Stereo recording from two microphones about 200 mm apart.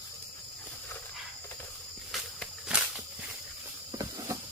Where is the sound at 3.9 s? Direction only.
15° right (ahead or behind).